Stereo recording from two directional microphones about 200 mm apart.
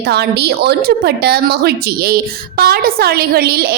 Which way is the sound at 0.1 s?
55° right (ahead or behind).